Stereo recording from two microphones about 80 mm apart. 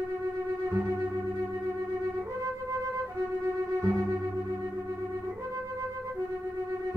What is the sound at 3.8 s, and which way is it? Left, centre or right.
Music, right.